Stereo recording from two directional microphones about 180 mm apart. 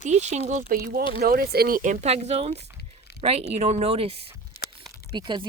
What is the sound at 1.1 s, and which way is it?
Speech, 55° right (ahead or behind).